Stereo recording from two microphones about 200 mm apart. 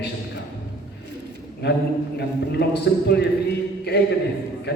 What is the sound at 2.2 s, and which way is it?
A man's voice, 55° left (ahead or behind).